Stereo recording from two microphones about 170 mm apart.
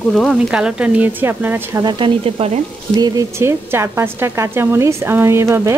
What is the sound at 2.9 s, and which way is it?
Speech, 20° right (ahead or behind).